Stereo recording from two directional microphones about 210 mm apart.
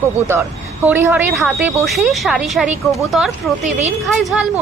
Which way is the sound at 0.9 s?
10° right (ahead or behind).